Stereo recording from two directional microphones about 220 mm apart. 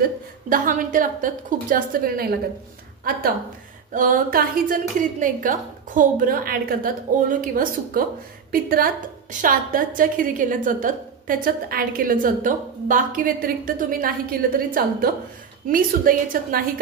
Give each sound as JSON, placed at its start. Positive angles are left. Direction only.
{"t": 0.0, "sound": "a woman's voice", "side_deg": -35}